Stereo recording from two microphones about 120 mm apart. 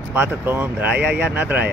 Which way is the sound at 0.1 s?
15° right (ahead or behind).